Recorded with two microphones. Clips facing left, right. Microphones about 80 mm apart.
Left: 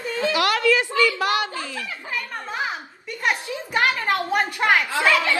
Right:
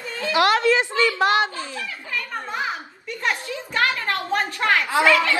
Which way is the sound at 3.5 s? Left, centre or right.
Centre.